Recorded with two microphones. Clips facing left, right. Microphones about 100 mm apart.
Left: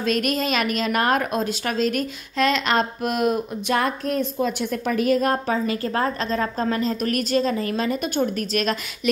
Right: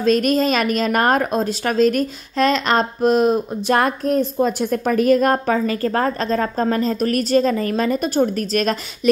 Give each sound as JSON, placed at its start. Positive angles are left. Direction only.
{"t": 0.0, "sound": "a woman's voice", "side_deg": -35}
{"t": 3.7, "sound": "a woman's voice", "side_deg": -45}